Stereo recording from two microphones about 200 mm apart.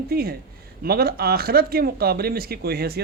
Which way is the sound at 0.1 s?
50° right (ahead or behind).